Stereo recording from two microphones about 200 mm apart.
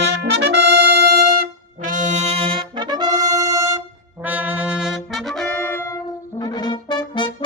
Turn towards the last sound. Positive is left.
turn(degrees=20)  # may be behind; listen again after turning